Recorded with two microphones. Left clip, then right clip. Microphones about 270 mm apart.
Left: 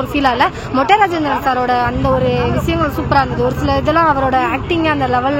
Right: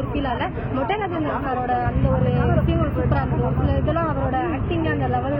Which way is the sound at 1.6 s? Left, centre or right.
Left.